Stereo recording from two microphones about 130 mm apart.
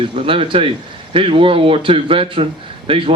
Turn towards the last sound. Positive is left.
turn(degrees=-45)  # may be behind; listen again after turning